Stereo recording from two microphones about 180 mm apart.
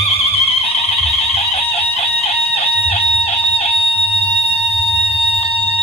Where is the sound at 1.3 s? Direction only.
35° left (ahead or behind).